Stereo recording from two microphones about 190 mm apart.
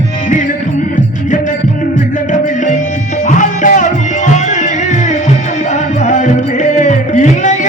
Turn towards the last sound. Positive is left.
turn(degrees=40)  # may be behind; listen again after turning